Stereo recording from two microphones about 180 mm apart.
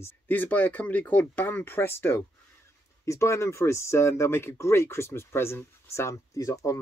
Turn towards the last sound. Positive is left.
turn(degrees=20)  # may be behind; listen again after turning